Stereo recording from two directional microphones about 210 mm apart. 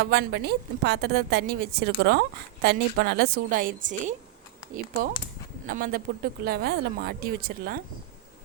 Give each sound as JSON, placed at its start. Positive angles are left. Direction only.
{"t": 0.0, "sound": "a woman's voice", "side_deg": -50}
{"t": 5.6, "sound": "a woman's voice", "side_deg": -45}